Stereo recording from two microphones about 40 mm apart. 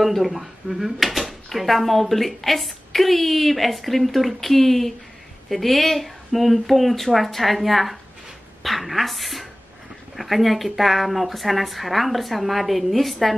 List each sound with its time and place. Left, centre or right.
0.0 s speech: centre